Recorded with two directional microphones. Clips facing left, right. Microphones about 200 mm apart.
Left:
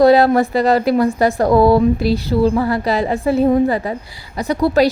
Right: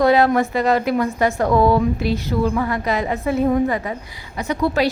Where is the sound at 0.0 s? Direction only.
35° left (ahead or behind).